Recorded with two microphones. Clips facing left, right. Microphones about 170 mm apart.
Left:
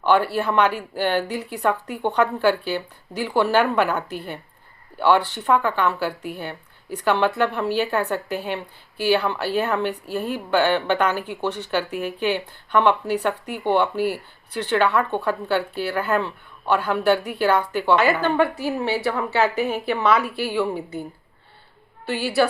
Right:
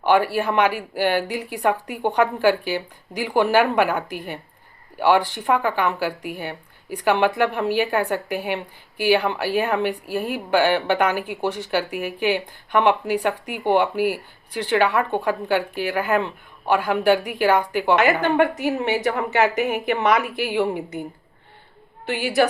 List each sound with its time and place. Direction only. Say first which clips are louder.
0.0 s a woman's voice: right 1 dB; 10° right (ahead or behind)